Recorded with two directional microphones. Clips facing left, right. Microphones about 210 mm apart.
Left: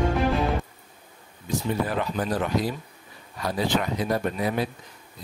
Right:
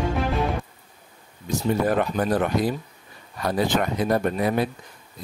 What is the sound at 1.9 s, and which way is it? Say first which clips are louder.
Speech: right 5 dB; 55° right (ahead or behind).